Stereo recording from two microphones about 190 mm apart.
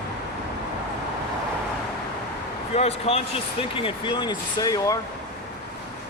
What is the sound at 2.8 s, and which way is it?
Speech, 30° left (ahead or behind).